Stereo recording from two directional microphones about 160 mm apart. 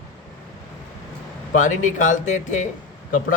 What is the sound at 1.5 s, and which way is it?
A man's voice, 50° left (ahead or behind).